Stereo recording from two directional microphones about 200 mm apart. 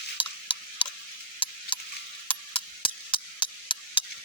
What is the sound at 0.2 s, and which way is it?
Tick-tock, 25° left (ahead or behind).